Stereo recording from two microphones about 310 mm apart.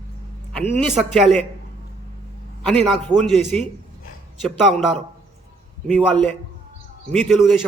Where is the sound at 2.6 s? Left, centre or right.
Centre.